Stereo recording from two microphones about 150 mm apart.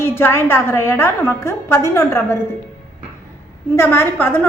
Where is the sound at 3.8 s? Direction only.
15° left (ahead or behind).